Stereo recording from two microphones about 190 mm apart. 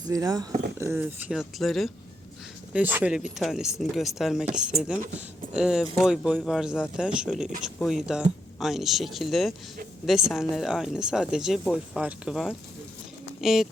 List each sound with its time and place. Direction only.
0.0 s speech: 20° right (ahead or behind); by 13.7 s centre (ahead or behind)